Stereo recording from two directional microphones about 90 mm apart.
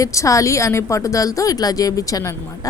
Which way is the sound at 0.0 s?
35° left (ahead or behind).